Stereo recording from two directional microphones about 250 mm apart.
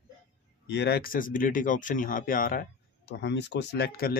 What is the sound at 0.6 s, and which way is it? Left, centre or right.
Speech, left.